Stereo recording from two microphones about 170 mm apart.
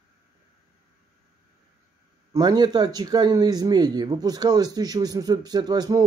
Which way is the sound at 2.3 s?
25° right (ahead or behind).